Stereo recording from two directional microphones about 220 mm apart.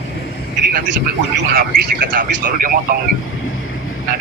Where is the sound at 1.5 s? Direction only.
45° right (ahead or behind).